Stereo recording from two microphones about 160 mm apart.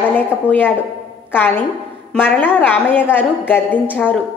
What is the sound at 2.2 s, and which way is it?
A woman's voice, 10° left (ahead or behind).